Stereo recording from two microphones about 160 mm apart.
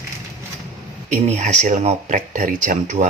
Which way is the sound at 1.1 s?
45° right (ahead or behind).